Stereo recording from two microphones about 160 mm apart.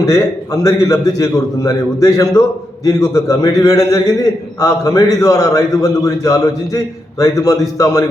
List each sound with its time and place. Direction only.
0.0 s a man's voice: 20° left (ahead or behind)